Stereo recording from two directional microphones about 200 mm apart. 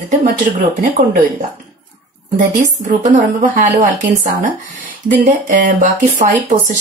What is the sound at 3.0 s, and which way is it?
Speech, 35° right (ahead or behind).